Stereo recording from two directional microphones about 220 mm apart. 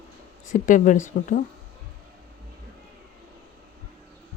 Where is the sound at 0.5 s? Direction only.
35° left (ahead or behind).